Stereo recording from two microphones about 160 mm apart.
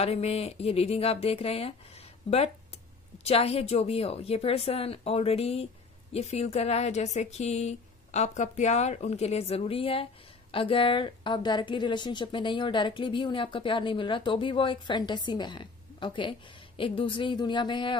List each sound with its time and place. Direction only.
0.0 s a woman's voice: 40° left (ahead or behind)